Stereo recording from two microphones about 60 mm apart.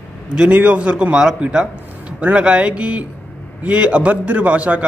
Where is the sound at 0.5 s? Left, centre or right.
Right.